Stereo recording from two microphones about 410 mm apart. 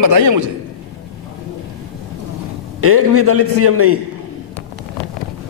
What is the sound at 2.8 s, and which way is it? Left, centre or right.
A man's voice, right.